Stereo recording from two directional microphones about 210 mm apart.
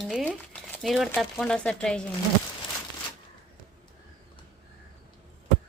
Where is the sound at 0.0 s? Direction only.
Centre (ahead or behind).